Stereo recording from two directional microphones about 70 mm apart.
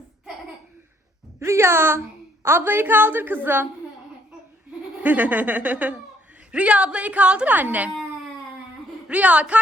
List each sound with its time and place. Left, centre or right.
1.4 s a woman's voice: right
5.0 s a woman's voice: right
9.0 s a woman's voice: centre